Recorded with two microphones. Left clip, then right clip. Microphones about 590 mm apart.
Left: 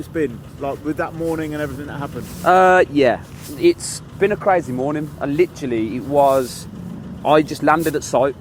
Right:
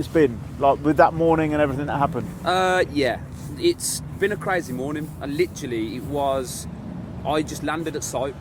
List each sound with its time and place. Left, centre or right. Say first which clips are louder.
0.1 s speech: right 3 dB; right
2.4 s speech: left 8 dB; left
4.2 s speech: left 7 dB; left